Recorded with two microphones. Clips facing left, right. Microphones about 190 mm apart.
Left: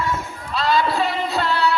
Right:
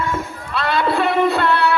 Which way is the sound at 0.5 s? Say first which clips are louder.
Right 1 dB; 60° right (ahead or behind).